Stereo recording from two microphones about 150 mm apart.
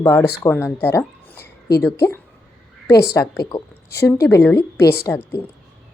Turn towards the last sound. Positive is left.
turn(degrees=15)  # may be behind; listen again after turning